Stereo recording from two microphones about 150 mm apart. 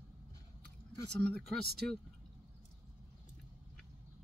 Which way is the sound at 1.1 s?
5° left (ahead or behind).